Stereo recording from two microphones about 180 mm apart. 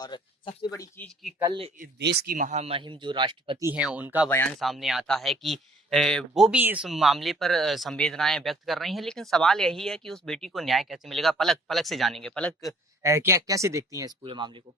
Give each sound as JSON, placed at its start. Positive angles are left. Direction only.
{"t": 0.0, "sound": "speech", "side_deg": 25}
{"t": 1.8, "sound": "speech", "side_deg": -60}
{"t": 3.6, "sound": "speech", "side_deg": -10}
{"t": 13.0, "sound": "speech", "side_deg": -15}
{"t": 14.3, "sound": "speech", "side_deg": -25}